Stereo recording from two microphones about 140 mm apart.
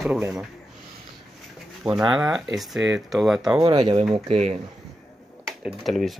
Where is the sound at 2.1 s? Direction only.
5° right (ahead or behind).